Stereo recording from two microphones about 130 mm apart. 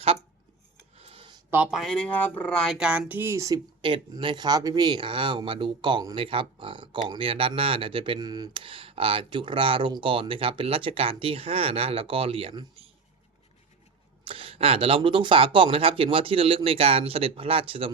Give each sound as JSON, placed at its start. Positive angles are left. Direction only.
{"t": 0.9, "sound": "a sound", "side_deg": -45}
{"t": 1.7, "sound": "speech", "side_deg": 5}
{"t": 3.8, "sound": "speech", "side_deg": -40}
{"t": 14.3, "sound": "speech", "side_deg": -45}